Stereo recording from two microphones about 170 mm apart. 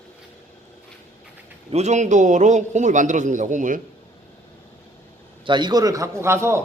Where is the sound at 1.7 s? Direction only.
40° right (ahead or behind).